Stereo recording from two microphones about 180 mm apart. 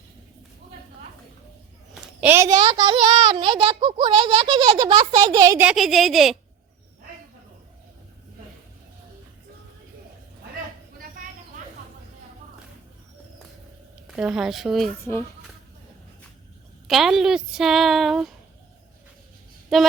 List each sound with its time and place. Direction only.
2.2 s a child's voice: 15° right (ahead or behind)
2.7 s a child's voice: 30° right (ahead or behind)
5.6 s a woman's voice: centre (ahead or behind)
14.2 s a woman's voice: 5° right (ahead or behind)
16.8 s a woman's voice: centre (ahead or behind)
19.7 s a woman's voice: centre (ahead or behind)